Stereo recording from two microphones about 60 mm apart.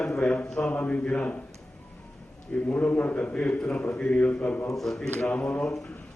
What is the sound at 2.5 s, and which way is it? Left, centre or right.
Speech, left.